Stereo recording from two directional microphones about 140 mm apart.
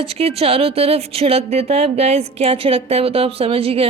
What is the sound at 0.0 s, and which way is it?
Speech, 45° right (ahead or behind).